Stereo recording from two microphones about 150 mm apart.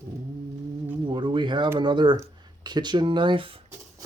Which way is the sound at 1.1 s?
30° right (ahead or behind).